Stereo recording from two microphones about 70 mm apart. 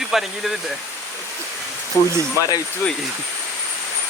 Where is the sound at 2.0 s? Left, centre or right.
Left.